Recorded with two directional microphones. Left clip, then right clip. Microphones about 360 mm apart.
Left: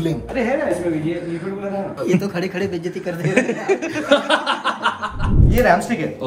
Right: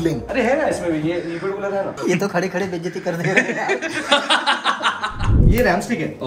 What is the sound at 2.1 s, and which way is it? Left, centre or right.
Speech, centre.